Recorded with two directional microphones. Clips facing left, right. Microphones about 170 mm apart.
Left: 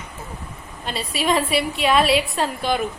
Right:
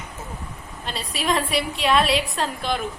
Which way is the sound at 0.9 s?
Centre (ahead or behind).